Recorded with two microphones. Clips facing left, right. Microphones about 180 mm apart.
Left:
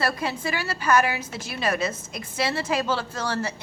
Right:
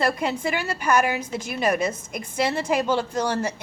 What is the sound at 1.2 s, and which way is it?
Speech, 50° right (ahead or behind).